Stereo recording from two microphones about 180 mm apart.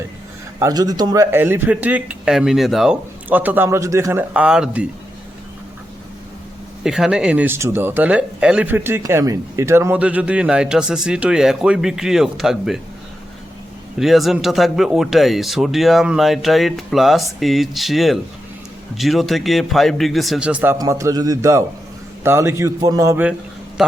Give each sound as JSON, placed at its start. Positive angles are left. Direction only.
{"t": 0.6, "sound": "a man's voice", "side_deg": -20}
{"t": 6.8, "sound": "speech", "side_deg": -5}
{"t": 14.0, "sound": "a man's voice", "side_deg": 0}